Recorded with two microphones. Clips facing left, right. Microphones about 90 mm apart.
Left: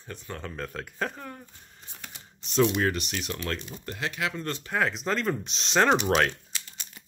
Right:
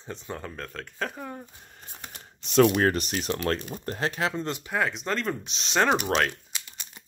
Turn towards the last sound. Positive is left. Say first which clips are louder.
# even
turn(degrees=-15)  # may be behind; listen again after turning